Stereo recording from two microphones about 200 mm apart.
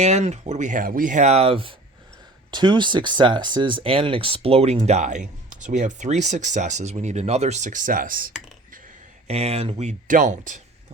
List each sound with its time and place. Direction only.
0.0 s speech: 35° right (ahead or behind)
9.2 s speech: 30° right (ahead or behind)